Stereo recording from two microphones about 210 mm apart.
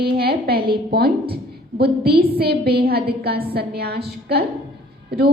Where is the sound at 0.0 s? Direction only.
50° right (ahead or behind).